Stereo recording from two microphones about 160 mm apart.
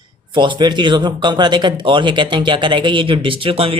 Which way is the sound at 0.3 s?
30° right (ahead or behind).